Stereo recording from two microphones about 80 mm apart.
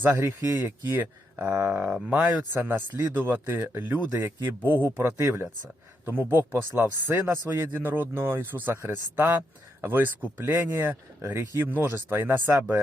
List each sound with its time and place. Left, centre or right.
0.1 s speech: right
0.9 s speech: right
4.2 s speech: right
4.7 s speech: right
10.5 s speech: right